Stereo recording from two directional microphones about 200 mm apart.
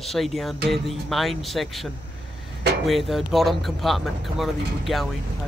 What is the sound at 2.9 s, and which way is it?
Speech, centre (ahead or behind).